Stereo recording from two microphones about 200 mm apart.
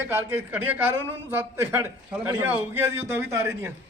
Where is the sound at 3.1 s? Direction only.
15° right (ahead or behind).